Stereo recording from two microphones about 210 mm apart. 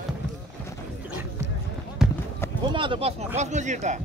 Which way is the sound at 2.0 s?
5° right (ahead or behind).